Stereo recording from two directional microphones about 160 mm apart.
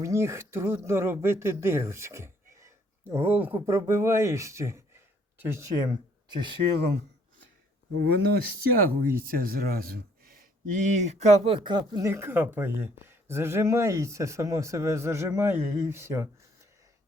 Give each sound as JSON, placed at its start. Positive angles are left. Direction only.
{"t": 0.0, "sound": "speech", "side_deg": -20}
{"t": 8.1, "sound": "speech", "side_deg": -75}
{"t": 12.0, "sound": "speech", "side_deg": -15}